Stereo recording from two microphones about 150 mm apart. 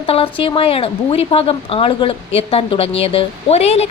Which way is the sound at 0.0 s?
35° left (ahead or behind).